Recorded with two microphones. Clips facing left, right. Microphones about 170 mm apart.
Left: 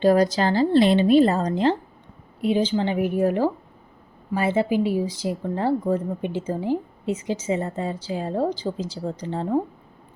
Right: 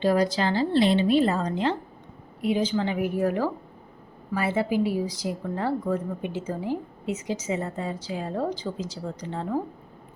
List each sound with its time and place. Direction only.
0.0 s speech: 45° left (ahead or behind); by 9.6 s 30° left (ahead or behind)